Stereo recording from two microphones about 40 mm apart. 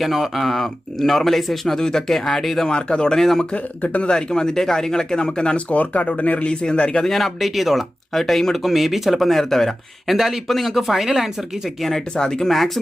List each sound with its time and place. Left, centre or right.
0.0 s speech: centre
2.6 s speech: left
3.2 s speech: centre
3.5 s speech: left
6.5 s speech: left
7.0 s speech: centre
8.2 s speech: centre
9.3 s speech: centre
10.2 s speech: centre
11.8 s speech: centre
12.5 s speech: centre